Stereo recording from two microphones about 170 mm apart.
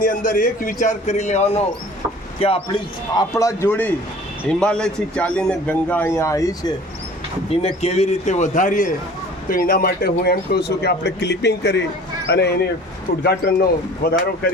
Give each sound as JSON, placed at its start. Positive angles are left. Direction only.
{"t": 0.0, "sound": "a man's voice", "side_deg": 55}
{"t": 3.2, "sound": "a man's voice", "side_deg": 20}
{"t": 7.5, "sound": "a man's voice", "side_deg": 35}
{"t": 9.5, "sound": "speech", "side_deg": 60}
{"t": 13.2, "sound": "a man's voice", "side_deg": 65}